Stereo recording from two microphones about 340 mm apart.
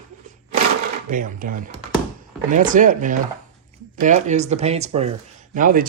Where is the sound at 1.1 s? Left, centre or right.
Right.